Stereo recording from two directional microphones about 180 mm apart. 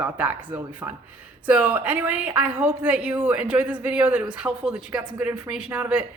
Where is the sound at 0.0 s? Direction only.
10° right (ahead or behind).